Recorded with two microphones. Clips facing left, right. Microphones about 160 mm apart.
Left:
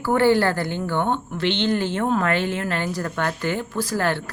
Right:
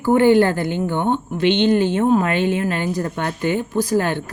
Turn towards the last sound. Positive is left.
turn(degrees=-20)  # may be behind; listen again after turning